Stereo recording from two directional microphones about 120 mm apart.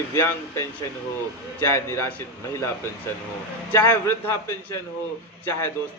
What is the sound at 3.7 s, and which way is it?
A man's voice, 20° left (ahead or behind).